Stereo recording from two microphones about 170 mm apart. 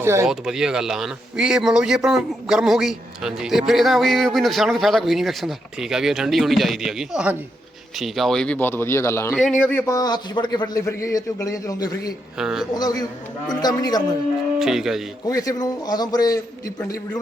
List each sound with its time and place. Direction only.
0.0 s speech: 15° right (ahead or behind)
0.3 s a man's voice: 5° right (ahead or behind); by 9.3 s 15° left (ahead or behind)
9.3 s a man's voice: centre (ahead or behind); by 12.1 s 20° left (ahead or behind)
12.4 s a man's voice: 5° right (ahead or behind)
12.7 s a man's voice: 20° left (ahead or behind)
14.6 s a man's voice: centre (ahead or behind)
15.3 s a man's voice: 20° left (ahead or behind)